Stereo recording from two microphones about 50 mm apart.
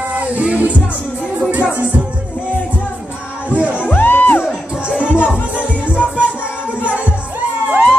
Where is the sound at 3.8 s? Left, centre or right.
Left.